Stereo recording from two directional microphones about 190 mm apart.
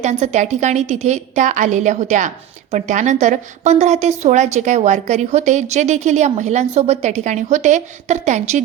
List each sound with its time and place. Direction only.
0.0 s a woman's voice: 35° right (ahead or behind)